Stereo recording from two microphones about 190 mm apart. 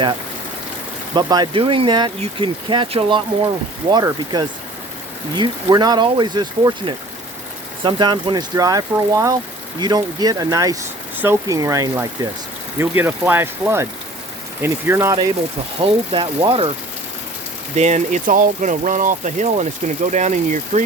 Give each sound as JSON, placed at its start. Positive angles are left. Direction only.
{"t": 1.1, "sound": "speech", "side_deg": -25}
{"t": 17.7, "sound": "speech", "side_deg": -40}